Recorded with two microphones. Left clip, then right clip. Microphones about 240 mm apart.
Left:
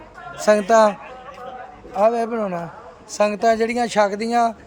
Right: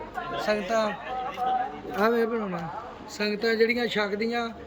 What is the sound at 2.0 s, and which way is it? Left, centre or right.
A woman's voice, centre.